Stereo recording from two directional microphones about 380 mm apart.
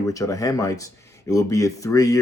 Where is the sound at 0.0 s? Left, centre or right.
Centre.